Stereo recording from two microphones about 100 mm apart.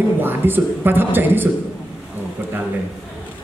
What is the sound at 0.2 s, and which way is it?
A man's voice, 20° right (ahead or behind).